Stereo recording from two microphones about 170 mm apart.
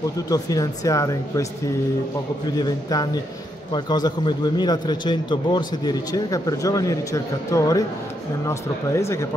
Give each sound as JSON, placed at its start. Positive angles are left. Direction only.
{"t": 0.3, "sound": "a man's voice", "side_deg": 20}
{"t": 2.6, "sound": "a man's voice", "side_deg": 25}